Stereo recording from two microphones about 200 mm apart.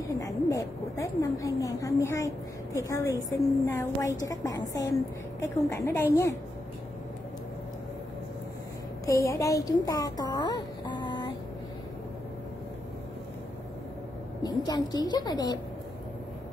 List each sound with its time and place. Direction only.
0.1 s a woman's voice: 15° left (ahead or behind)
9.0 s speech: 15° left (ahead or behind)
14.4 s a woman's voice: 20° left (ahead or behind)